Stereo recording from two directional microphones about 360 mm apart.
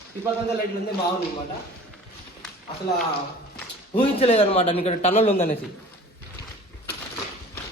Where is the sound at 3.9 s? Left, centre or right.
Centre.